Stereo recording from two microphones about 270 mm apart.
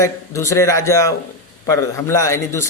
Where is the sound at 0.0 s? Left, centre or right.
Centre.